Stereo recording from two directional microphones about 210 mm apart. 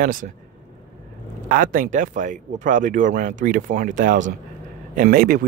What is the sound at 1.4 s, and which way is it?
Speech, 40° right (ahead or behind).